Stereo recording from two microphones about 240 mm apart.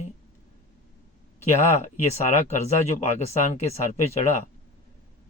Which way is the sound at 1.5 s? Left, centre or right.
Left.